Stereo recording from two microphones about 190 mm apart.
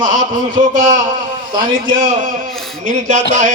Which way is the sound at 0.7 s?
40° right (ahead or behind).